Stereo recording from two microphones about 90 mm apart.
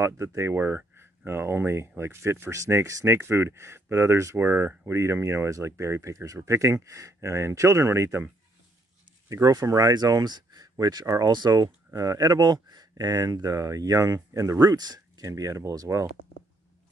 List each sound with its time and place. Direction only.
0.0 s speech: 30° right (ahead or behind)
9.3 s speech: 40° right (ahead or behind)